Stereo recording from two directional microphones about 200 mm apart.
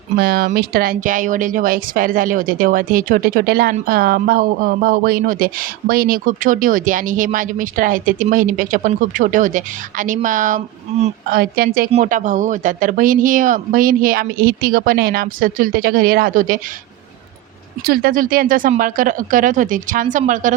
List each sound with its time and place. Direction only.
0.2 s a woman's voice: 50° right (ahead or behind)
11.9 s speech: 35° right (ahead or behind)
17.8 s a woman's voice: 50° right (ahead or behind)